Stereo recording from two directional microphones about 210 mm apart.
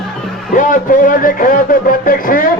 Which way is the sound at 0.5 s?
40° left (ahead or behind).